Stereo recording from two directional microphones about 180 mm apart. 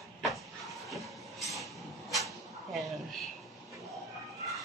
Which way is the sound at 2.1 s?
Centre (ahead or behind).